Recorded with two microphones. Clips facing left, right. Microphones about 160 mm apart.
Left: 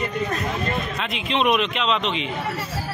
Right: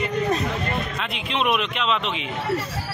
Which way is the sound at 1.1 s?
Centre (ahead or behind).